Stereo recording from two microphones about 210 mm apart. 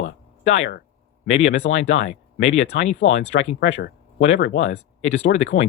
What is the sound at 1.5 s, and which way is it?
Speech, 65° left (ahead or behind).